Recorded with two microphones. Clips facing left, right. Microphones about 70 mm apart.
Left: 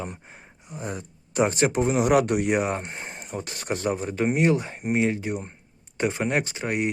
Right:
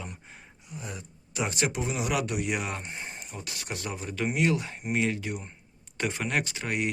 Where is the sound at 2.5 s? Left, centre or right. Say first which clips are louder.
Left 8 dB; left.